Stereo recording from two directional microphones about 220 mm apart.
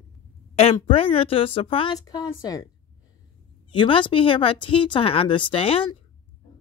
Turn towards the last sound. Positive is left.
turn(degrees=25)  # may be behind; listen again after turning